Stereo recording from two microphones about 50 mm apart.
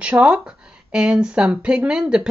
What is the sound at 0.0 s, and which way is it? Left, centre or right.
Speech, right.